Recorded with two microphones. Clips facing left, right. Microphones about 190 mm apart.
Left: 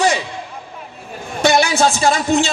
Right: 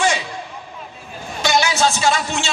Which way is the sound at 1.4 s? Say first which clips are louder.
Left 5 dB; 55° left (ahead or behind).